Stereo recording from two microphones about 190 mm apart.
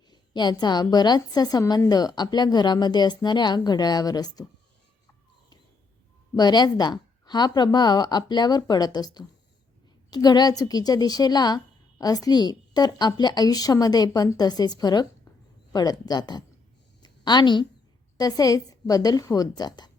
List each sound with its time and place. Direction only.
0.1 s a woman's voice: 20° left (ahead or behind)
6.3 s a woman's voice: 20° left (ahead or behind)
17.0 s a sound: 20° left (ahead or behind)
18.2 s a woman's voice: 20° left (ahead or behind)